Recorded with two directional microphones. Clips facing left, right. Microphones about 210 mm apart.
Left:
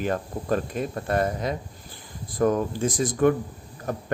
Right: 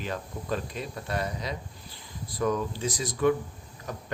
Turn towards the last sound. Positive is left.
turn(degrees=50)  # may be behind; listen again after turning